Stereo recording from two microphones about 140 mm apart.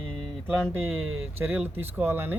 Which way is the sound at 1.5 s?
15° right (ahead or behind).